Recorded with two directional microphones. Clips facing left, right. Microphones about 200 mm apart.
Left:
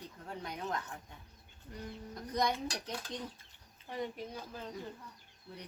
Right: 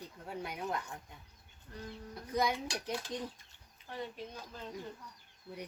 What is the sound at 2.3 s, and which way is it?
Speech, 5° right (ahead or behind).